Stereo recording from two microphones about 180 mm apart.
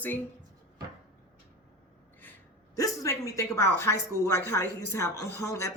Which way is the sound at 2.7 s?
20° left (ahead or behind).